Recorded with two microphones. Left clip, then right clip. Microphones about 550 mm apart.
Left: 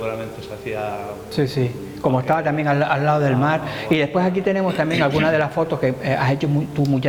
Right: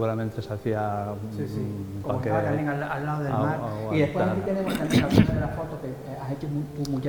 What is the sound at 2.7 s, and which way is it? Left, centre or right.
Speech, left.